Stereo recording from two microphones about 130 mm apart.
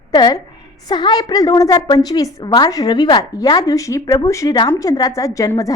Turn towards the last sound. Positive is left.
turn(degrees=25)  # may be behind; listen again after turning